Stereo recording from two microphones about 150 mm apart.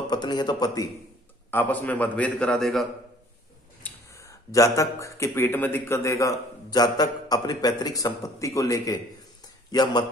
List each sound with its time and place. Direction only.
0.1 s a man's voice: 30° left (ahead or behind)
1.5 s a man's voice: 15° left (ahead or behind)
3.8 s speech: 20° left (ahead or behind)